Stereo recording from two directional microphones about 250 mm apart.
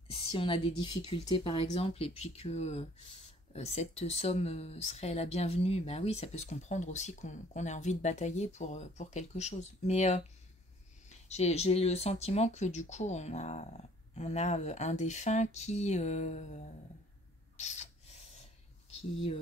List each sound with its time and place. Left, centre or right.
0.1 s speech: left
17.6 s a sound: left
18.9 s speech: left